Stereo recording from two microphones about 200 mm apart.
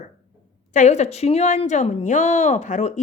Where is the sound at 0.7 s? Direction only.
35° left (ahead or behind).